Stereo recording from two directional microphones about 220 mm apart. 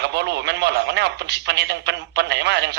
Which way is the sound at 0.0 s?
50° right (ahead or behind).